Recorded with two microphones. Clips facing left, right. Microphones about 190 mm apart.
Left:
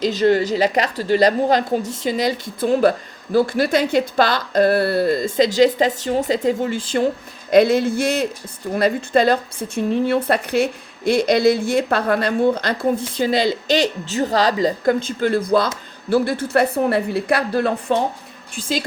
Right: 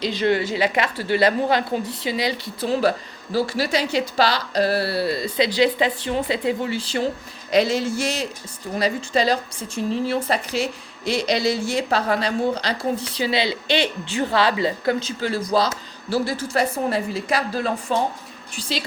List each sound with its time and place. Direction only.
0.0 s speech: 45° left (ahead or behind); by 17.9 s 60° left (ahead or behind)